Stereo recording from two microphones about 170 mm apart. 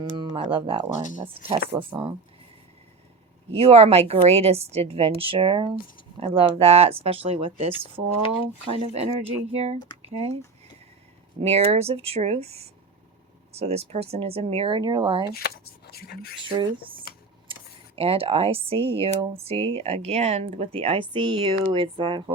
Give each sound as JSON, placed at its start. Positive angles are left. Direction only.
{"t": 0.2, "sound": "speech", "side_deg": -30}
{"t": 3.5, "sound": "speech", "side_deg": -35}
{"t": 11.3, "sound": "speech", "side_deg": -40}
{"t": 15.3, "sound": "speech", "side_deg": 65}
{"t": 16.4, "sound": "speech", "side_deg": -30}
{"t": 17.1, "sound": "a sound", "side_deg": 60}
{"t": 17.5, "sound": "speech", "side_deg": -35}